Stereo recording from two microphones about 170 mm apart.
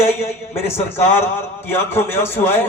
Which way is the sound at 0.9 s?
15° left (ahead or behind).